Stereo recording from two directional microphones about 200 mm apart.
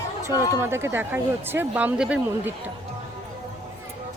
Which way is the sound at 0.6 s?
15° right (ahead or behind).